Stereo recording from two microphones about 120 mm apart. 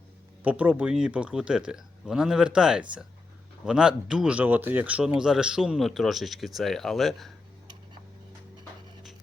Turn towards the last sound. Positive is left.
turn(degrees=0)  # may be behind; listen again after turning